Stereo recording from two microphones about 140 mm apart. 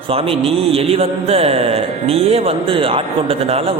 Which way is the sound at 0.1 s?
45° right (ahead or behind).